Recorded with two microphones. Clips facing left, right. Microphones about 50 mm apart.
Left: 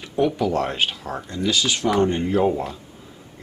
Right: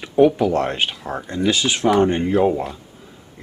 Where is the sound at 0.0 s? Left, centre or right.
Right.